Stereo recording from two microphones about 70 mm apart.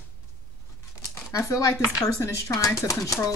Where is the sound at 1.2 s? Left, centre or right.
Left.